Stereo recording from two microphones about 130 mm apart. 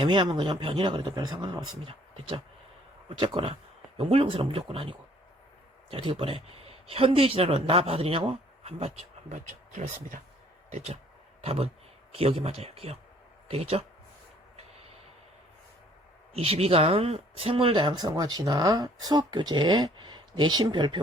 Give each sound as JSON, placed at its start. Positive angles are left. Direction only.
{"t": 0.0, "sound": "speech", "side_deg": -35}
{"t": 9.3, "sound": "speech", "side_deg": -75}
{"t": 10.7, "sound": "speech", "side_deg": -60}
{"t": 16.3, "sound": "speech", "side_deg": -50}